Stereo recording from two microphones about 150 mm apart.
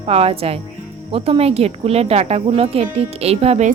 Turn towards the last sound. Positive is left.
turn(degrees=-45)  # may be behind; listen again after turning